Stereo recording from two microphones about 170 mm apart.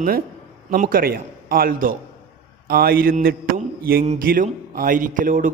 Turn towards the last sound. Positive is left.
turn(degrees=-50)  # may be behind; listen again after turning